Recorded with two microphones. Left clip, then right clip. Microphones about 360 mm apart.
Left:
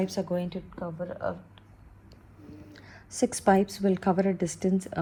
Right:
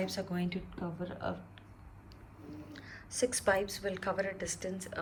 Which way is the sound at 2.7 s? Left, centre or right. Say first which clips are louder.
Even; centre.